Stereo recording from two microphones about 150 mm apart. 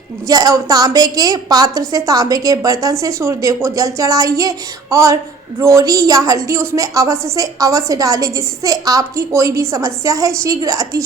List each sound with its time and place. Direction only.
0.3 s a woman's voice: 25° right (ahead or behind)